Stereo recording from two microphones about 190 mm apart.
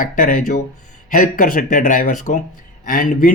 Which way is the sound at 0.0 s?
45° left (ahead or behind).